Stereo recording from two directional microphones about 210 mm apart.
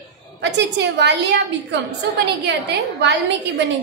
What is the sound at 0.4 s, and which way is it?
A woman's voice, 55° right (ahead or behind).